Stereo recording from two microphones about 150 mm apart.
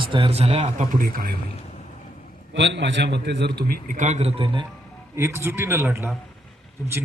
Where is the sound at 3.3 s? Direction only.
90° right; by 4.3 s 50° right (ahead or behind).